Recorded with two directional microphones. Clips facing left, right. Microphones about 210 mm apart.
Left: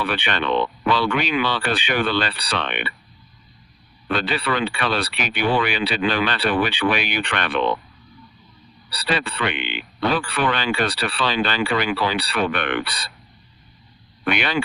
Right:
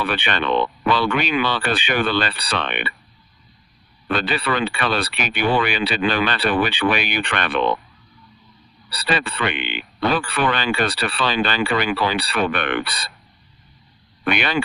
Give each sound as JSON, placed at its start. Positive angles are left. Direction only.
{"t": 0.0, "sound": "speech", "side_deg": -50}
{"t": 4.1, "sound": "speech", "side_deg": -50}
{"t": 8.9, "sound": "speech", "side_deg": -50}
{"t": 14.3, "sound": "speech", "side_deg": -50}